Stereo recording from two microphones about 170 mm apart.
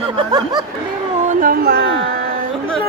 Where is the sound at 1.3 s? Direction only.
55° right (ahead or behind).